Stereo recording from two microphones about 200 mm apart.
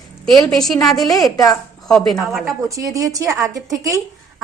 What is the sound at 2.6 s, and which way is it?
Speech, 15° right (ahead or behind).